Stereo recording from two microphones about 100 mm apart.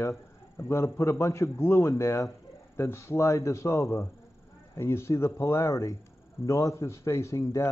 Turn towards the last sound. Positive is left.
turn(degrees=30)  # may be behind; listen again after turning